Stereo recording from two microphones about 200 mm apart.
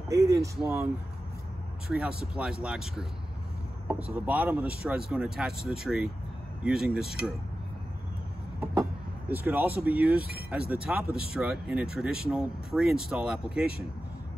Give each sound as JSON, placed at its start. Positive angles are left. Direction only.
{"t": 0.1, "sound": "speech", "side_deg": -15}
{"t": 0.6, "sound": "speech", "side_deg": 0}
{"t": 1.9, "sound": "speech", "side_deg": -5}
{"t": 9.3, "sound": "speech", "side_deg": -10}